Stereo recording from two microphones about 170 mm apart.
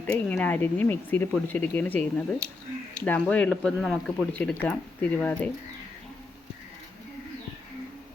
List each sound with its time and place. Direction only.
0.0 s speech: 10° left (ahead or behind)